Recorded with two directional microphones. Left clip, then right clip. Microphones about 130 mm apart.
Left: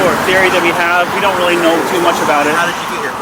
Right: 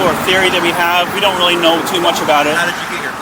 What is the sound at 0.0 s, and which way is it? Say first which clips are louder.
Speech: left 2 dB; 20° right (ahead or behind).